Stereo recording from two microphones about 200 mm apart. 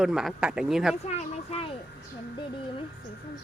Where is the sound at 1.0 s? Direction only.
30° left (ahead or behind).